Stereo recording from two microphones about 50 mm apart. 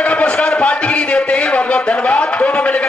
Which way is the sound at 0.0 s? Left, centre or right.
Left.